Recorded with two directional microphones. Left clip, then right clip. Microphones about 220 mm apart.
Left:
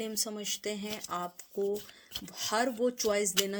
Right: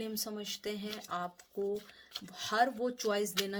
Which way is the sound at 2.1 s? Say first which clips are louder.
Right 1 dB; 40° left (ahead or behind).